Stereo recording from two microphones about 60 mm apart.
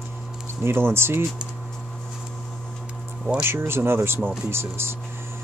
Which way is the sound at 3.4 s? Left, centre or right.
Right.